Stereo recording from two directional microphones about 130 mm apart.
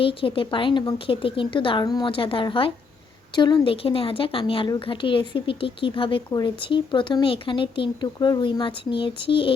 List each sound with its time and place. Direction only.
0.0 s speech: 45° left (ahead or behind)